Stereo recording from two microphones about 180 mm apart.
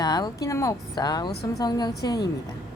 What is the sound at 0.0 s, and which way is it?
A woman's voice, 20° left (ahead or behind).